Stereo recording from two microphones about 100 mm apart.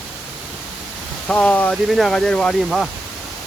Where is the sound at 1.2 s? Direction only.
15° left (ahead or behind).